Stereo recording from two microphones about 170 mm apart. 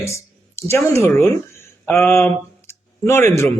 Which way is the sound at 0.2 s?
15° left (ahead or behind).